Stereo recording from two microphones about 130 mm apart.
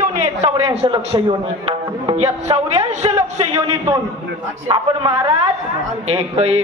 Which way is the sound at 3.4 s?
30° right (ahead or behind).